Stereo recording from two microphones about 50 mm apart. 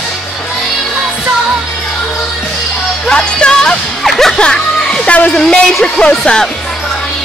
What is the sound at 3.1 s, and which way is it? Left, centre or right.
Music, centre.